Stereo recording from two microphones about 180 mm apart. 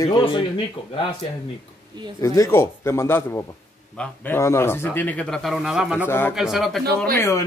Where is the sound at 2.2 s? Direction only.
15° left (ahead or behind); by 6.1 s 5° right (ahead or behind).